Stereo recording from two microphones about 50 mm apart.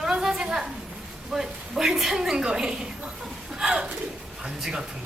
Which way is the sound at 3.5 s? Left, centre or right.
Centre.